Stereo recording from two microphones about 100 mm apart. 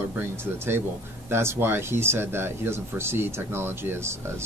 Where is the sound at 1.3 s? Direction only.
25° right (ahead or behind).